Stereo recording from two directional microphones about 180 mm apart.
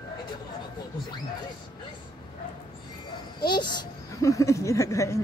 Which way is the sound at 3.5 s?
25° left (ahead or behind).